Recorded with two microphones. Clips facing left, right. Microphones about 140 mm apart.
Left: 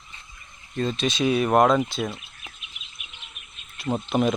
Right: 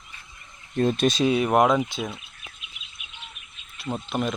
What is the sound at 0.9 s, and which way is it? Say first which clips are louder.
Speech: right 4 dB; 45° right (ahead or behind).